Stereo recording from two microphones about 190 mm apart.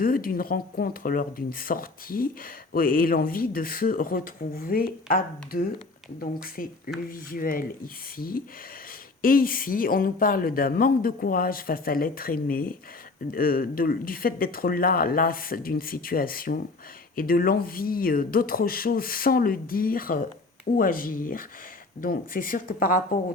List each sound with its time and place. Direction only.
0.0 s speech: 50° left (ahead or behind)